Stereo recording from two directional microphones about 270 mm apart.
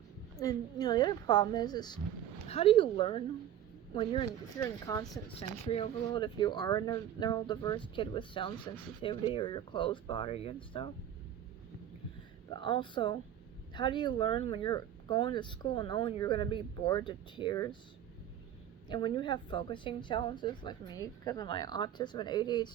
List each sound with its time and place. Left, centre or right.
0.3 s speech: centre
12.5 s speech: centre
18.9 s speech: centre